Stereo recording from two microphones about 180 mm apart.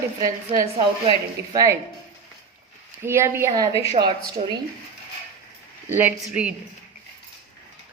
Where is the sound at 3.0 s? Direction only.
15° right (ahead or behind).